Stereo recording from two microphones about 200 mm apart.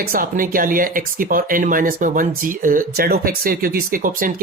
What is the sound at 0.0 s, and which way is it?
Speech, 45° right (ahead or behind).